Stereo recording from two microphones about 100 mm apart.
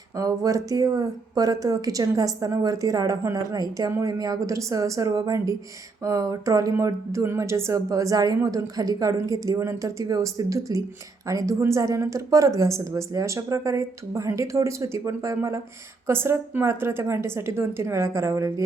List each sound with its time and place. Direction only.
0.2 s a woman's voice: 35° right (ahead or behind)